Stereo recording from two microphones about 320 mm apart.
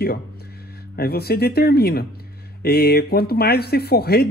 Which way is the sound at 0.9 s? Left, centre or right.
Left.